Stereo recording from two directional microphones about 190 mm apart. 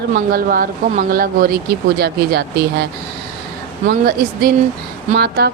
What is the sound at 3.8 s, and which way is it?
A woman's voice, 55° right (ahead or behind).